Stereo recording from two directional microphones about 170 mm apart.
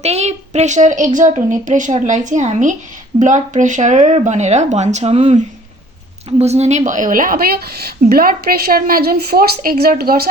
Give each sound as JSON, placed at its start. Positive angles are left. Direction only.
{"t": 0.0, "sound": "a woman's voice", "side_deg": -40}
{"t": 6.4, "sound": "a woman's voice", "side_deg": -40}